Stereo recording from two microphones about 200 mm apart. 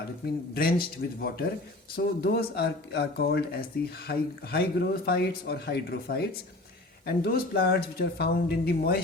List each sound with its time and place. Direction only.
0.5 s speech: 50° left (ahead or behind)